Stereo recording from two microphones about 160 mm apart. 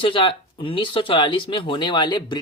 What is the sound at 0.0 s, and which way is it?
Speech, 30° left (ahead or behind).